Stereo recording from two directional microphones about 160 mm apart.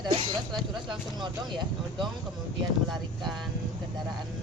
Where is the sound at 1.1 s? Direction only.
30° right (ahead or behind).